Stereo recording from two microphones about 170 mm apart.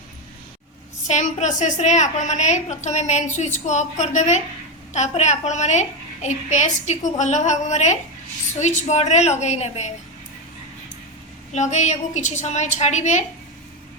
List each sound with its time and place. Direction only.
1.0 s a woman's voice: 45° left (ahead or behind)
11.5 s a woman's voice: 45° left (ahead or behind)